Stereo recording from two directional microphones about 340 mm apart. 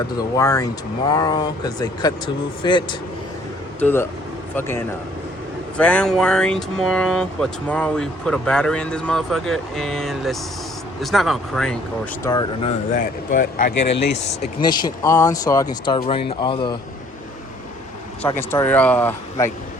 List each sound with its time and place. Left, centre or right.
0.3 s speech: centre
5.7 s speech: centre
12.9 s speech: left
18.2 s speech: centre